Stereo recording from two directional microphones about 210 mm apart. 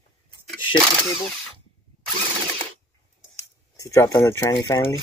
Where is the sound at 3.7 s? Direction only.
15° left (ahead or behind).